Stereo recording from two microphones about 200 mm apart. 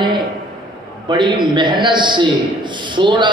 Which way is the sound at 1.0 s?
25° right (ahead or behind).